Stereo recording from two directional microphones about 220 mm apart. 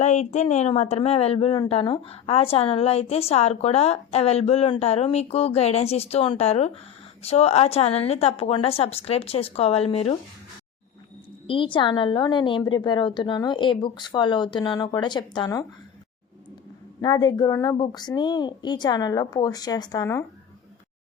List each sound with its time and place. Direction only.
0.0 s a woman's voice: 30° left (ahead or behind)
11.4 s a woman's voice: 25° left (ahead or behind)
17.0 s a woman's voice: 20° left (ahead or behind)